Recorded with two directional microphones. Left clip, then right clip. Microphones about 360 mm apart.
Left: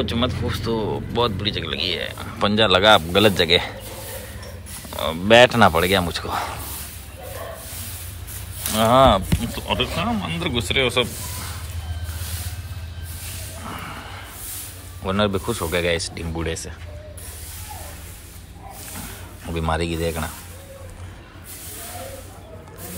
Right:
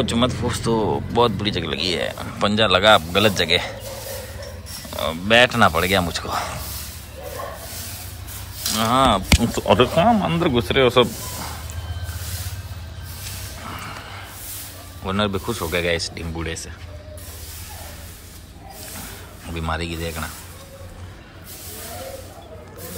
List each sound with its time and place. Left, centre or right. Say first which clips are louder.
0.0 s speech: right 3 dB; centre
4.9 s speech: left 2 dB; centre
8.7 s speech: left 3 dB; centre
9.4 s speech: right 7 dB; right
13.7 s a sound: even; centre
15.0 s speech: left 1 dB; centre
19.5 s speech: left 3 dB; centre